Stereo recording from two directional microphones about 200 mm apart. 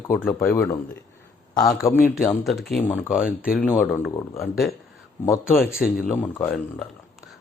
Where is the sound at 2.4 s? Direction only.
Centre (ahead or behind).